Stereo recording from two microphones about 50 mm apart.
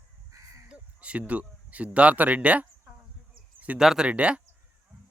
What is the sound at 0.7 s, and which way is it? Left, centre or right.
Crow, right.